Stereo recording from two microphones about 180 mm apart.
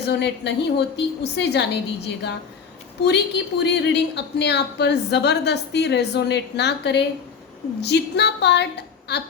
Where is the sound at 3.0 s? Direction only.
70° left (ahead or behind).